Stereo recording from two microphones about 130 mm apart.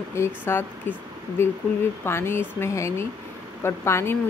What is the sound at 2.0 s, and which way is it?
A woman's voice, 20° left (ahead or behind).